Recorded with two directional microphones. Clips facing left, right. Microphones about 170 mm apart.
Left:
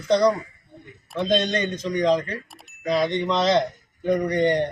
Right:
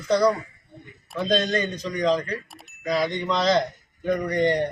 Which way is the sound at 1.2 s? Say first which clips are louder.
Left 1 dB; 20° left (ahead or behind).